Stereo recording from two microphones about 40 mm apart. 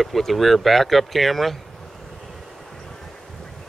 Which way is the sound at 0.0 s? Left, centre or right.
Centre.